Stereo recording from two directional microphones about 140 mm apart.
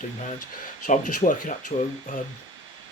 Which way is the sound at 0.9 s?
65° left (ahead or behind).